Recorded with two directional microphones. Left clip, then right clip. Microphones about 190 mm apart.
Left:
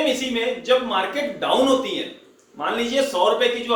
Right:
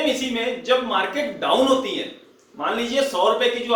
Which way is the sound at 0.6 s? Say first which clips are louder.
Even; 15° left (ahead or behind).